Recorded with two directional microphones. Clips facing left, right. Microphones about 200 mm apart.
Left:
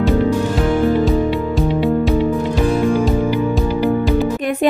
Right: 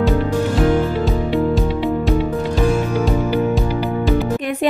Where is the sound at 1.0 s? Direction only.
Centre (ahead or behind).